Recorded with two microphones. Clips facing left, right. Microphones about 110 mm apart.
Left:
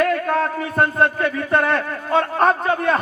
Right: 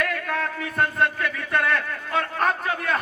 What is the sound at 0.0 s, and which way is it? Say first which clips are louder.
A man's voice: left 8 dB; 35° left (ahead or behind).